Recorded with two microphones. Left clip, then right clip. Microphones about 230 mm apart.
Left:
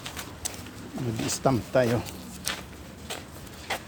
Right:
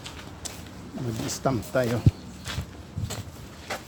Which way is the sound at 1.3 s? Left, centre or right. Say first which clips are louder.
Left 2 dB; centre.